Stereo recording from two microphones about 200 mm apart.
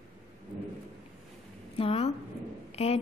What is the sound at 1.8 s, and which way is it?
A woman's voice, 30° left (ahead or behind).